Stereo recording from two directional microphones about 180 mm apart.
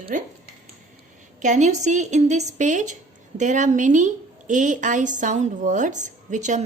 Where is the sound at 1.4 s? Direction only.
40° right (ahead or behind).